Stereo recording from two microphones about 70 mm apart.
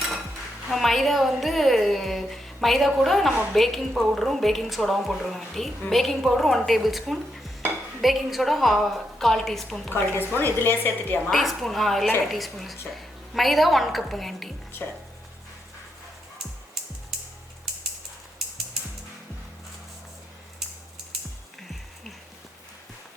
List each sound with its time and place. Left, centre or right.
0.7 s a woman's voice: centre
9.9 s a woman's voice: left
11.3 s a woman's voice: centre